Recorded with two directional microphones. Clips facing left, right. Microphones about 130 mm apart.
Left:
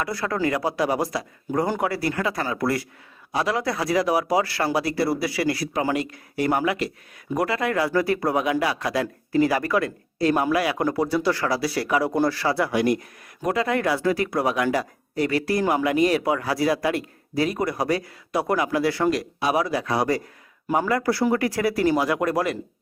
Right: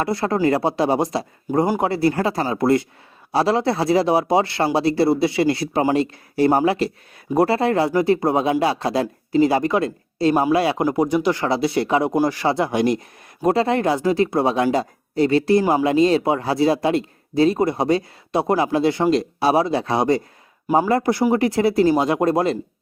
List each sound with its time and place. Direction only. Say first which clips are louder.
0.0 s speech: right 5 dB; 25° right (ahead or behind)
1.5 s speech: right 5 dB; 15° right (ahead or behind)
1.8 s speech: right 5 dB; 25° right (ahead or behind)